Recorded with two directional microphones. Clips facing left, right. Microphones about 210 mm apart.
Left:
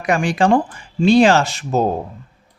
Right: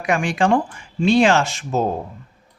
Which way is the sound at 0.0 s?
35° left (ahead or behind).